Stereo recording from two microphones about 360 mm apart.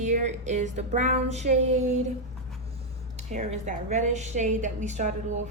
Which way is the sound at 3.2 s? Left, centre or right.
Centre.